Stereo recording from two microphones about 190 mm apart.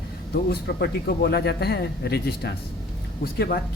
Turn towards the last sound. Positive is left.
turn(degrees=55)  # may be behind; listen again after turning